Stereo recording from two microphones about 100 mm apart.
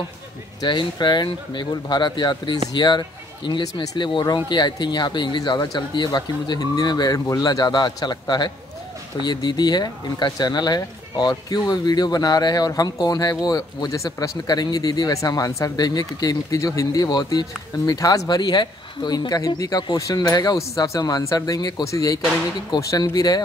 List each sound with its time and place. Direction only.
0.6 s speech: 45° left (ahead or behind)